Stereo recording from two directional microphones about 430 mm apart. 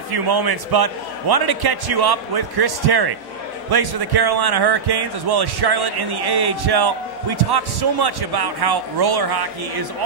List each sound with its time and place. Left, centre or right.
0.1 s a man's voice: right